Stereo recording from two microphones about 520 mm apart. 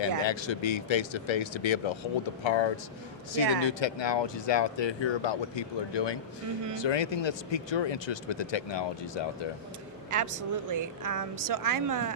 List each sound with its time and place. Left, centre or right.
0.2 s speech: left
10.1 s a woman's voice: right